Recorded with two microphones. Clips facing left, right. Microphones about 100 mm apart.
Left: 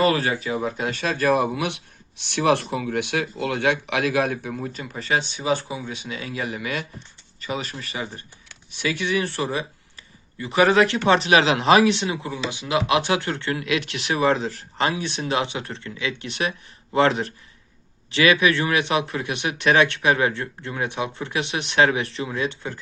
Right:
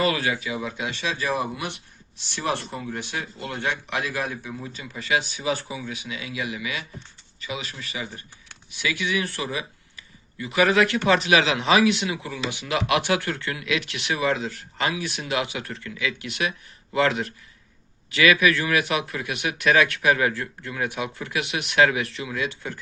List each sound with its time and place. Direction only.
0.0 s speech: 35° left (ahead or behind); by 4.7 s 60° left (ahead or behind)
4.7 s speech: 45° left (ahead or behind)
12.5 s speech: 20° left (ahead or behind)